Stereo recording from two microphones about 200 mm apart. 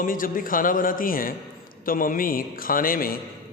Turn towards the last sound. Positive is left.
turn(degrees=45)  # may be behind; listen again after turning